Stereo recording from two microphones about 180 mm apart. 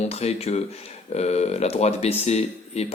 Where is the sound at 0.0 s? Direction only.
35° left (ahead or behind).